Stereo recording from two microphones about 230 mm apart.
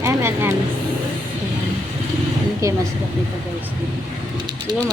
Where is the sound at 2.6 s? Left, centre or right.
Centre.